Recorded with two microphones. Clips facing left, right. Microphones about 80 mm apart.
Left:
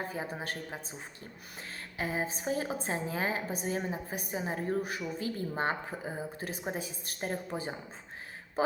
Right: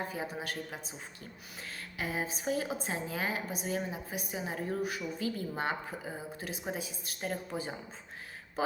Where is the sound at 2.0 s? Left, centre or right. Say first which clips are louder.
Left 2 dB; left.